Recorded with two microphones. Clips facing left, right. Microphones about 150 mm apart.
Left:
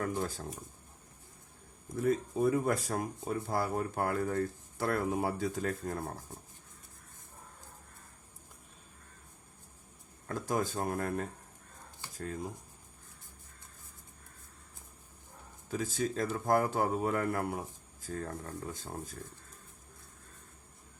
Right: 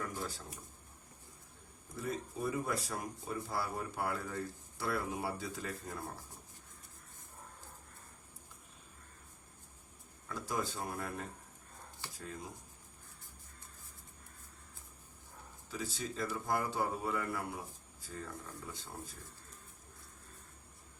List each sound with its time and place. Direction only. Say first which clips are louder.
0.0 s speech: left 7 dB; 55° left (ahead or behind)
2.0 s speech: left 9 dB; 50° left (ahead or behind)
10.2 s speech: left 5 dB; 50° left (ahead or behind)
12.1 s speech: left 8 dB; 55° left (ahead or behind)
15.7 s speech: left 8 dB; 50° left (ahead or behind)